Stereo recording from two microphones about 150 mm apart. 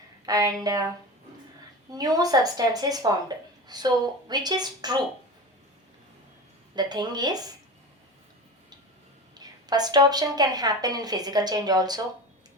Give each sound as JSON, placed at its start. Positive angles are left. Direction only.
{"t": 0.3, "sound": "a woman's voice", "side_deg": -25}
{"t": 1.9, "sound": "a woman's voice", "side_deg": -25}
{"t": 6.7, "sound": "a woman's voice", "side_deg": -30}
{"t": 9.3, "sound": "a woman's voice", "side_deg": -25}